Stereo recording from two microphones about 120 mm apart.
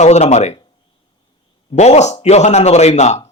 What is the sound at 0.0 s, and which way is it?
Speech, 70° left (ahead or behind).